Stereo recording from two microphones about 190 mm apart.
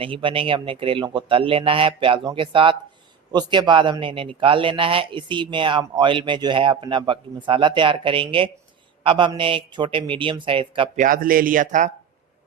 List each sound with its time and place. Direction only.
0.0 s speech: 25° right (ahead or behind)
10.9 s speech: 45° right (ahead or behind)